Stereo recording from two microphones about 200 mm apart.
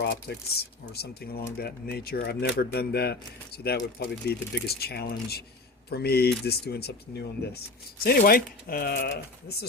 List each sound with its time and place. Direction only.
0.0 s speech: 55° left (ahead or behind)
8.0 s speech: 50° left (ahead or behind)